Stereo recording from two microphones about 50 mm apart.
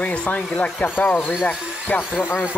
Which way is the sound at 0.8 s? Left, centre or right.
Left.